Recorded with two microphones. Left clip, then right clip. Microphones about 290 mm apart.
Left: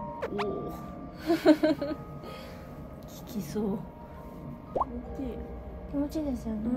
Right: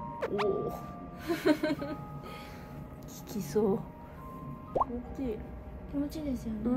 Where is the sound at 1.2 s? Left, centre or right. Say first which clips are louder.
Left 6 dB; centre.